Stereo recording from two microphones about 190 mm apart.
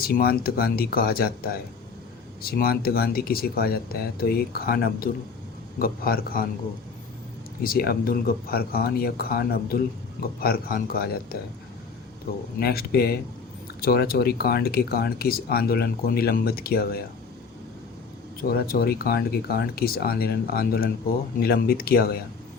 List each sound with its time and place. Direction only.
0.0 s speech: 55° left (ahead or behind)
2.4 s speech: 50° left (ahead or behind)
7.6 s speech: 50° left (ahead or behind)
12.5 s speech: 55° left (ahead or behind)
18.4 s speech: 50° left (ahead or behind)